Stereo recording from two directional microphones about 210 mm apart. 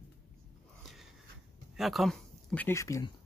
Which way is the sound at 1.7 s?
Centre (ahead or behind).